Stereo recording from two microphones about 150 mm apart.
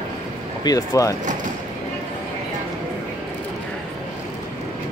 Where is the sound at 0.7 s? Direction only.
25° left (ahead or behind).